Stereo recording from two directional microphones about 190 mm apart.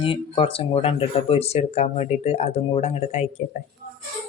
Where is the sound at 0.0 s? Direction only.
30° left (ahead or behind).